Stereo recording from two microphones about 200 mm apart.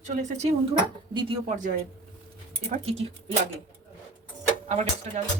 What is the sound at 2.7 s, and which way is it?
Speech, 40° right (ahead or behind).